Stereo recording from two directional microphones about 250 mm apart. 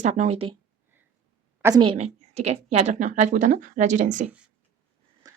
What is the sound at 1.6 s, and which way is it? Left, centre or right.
A woman's voice, centre.